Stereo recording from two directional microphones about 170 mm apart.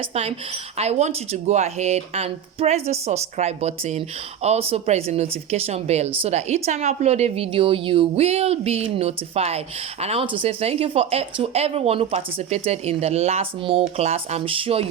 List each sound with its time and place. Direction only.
0.1 s speech: 40° right (ahead or behind)